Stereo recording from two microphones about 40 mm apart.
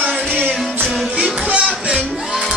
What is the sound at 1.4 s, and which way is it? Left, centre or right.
Music, right.